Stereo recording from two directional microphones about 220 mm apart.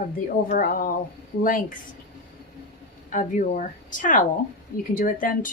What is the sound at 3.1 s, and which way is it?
Speech, 35° left (ahead or behind).